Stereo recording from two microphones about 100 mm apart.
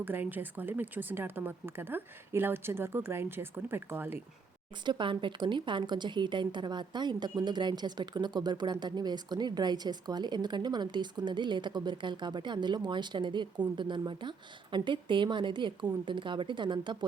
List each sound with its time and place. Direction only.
0.0 s speech: 20° right (ahead or behind)
4.9 s a woman's voice: 55° right (ahead or behind)